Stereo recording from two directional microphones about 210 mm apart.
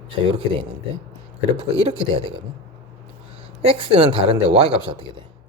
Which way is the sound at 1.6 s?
25° right (ahead or behind).